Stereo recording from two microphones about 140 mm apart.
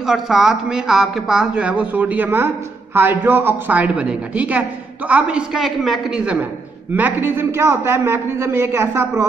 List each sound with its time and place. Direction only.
0.0 s a woman's voice: 5° right (ahead or behind); by 9.2 s 20° right (ahead or behind)